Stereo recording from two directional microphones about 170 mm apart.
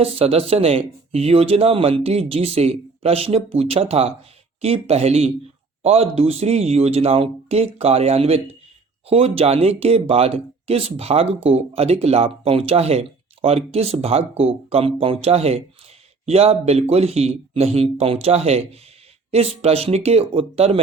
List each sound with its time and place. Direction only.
0.0 s speech: 35° right (ahead or behind)